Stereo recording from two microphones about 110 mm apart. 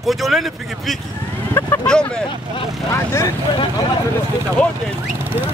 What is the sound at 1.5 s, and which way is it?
Speech, 20° left (ahead or behind).